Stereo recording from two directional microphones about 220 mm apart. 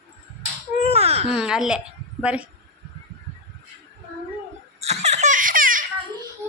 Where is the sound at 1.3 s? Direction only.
5° right (ahead or behind).